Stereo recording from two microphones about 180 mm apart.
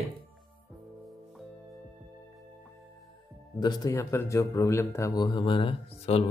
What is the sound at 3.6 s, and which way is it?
Speech, 20° left (ahead or behind).